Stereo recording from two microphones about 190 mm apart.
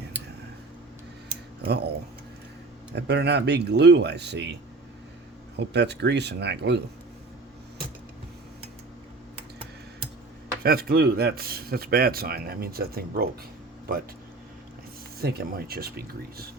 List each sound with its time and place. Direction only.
1.6 s speech: 60° right (ahead or behind)
2.9 s speech: 65° right (ahead or behind)
5.5 s speech: 65° right (ahead or behind)
10.6 s speech: 55° right (ahead or behind)
15.2 s speech: 55° right (ahead or behind)